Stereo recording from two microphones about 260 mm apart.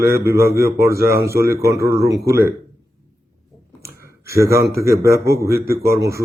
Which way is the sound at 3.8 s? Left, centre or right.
Centre.